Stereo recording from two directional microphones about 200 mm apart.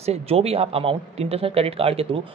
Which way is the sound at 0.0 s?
30° right (ahead or behind).